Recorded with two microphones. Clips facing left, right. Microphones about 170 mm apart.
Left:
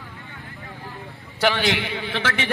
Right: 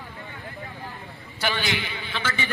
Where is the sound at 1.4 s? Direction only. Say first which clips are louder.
Left 6 dB; 75° left (ahead or behind).